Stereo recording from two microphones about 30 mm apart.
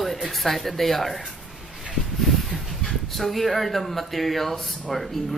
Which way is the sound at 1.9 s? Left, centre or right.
Centre.